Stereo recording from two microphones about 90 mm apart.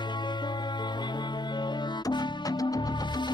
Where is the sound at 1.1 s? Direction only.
55° left (ahead or behind).